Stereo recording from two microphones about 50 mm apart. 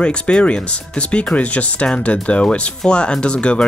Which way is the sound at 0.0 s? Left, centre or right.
Centre.